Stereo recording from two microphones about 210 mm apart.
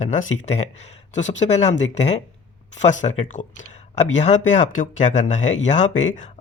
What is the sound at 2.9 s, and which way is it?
Speech, 35° left (ahead or behind).